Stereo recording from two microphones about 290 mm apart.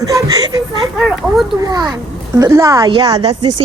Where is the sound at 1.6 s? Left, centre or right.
Centre.